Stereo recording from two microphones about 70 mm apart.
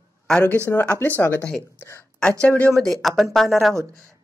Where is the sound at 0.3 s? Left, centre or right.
Centre.